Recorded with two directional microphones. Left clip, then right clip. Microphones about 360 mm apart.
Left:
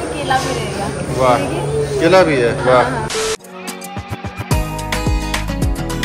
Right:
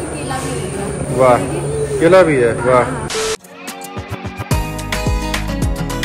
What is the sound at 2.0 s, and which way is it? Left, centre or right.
Speech, centre.